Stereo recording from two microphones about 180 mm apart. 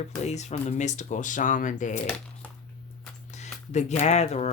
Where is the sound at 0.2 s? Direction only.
40° left (ahead or behind).